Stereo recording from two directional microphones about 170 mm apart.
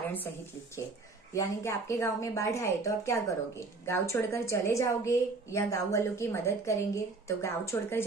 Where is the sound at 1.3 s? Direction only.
15° left (ahead or behind).